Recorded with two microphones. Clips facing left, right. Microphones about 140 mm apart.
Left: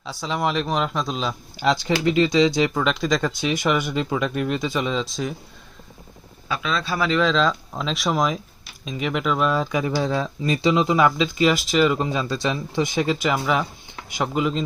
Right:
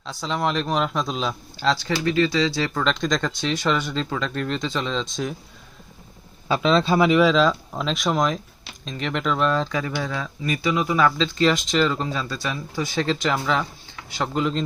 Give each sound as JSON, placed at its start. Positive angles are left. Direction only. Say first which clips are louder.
{"t": 0.0, "sound": "a man's voice", "louder": "even", "side_deg": 5}
{"t": 1.5, "sound": "speech", "louder": "left 2 dB", "side_deg": 15}
{"t": 6.5, "sound": "speech", "louder": "right 7 dB", "side_deg": -30}
{"t": 7.1, "sound": "a man's voice", "louder": "left 1 dB", "side_deg": -10}
{"t": 9.9, "sound": "speech", "louder": "left 5 dB", "side_deg": 30}